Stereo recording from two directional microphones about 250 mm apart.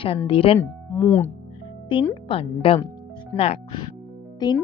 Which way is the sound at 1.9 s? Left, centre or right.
Centre.